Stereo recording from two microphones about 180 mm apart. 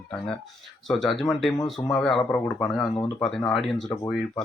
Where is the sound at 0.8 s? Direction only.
Centre (ahead or behind).